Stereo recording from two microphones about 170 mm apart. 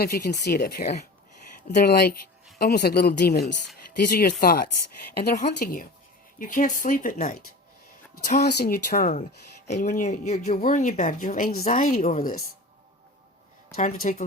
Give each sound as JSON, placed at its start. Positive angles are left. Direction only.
{"t": 0.0, "sound": "speech", "side_deg": 70}
{"t": 5.4, "sound": "speech", "side_deg": 55}
{"t": 8.4, "sound": "speech", "side_deg": 65}
{"t": 9.6, "sound": "speech", "side_deg": 45}
{"t": 13.7, "sound": "speech", "side_deg": 50}